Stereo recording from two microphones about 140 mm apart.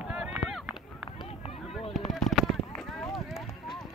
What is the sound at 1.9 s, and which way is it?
Fireworks, centre (ahead or behind).